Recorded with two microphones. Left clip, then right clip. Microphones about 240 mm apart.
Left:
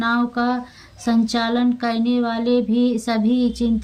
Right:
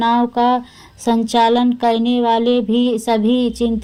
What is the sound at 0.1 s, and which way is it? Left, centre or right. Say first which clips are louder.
Speech: right 6 dB; centre.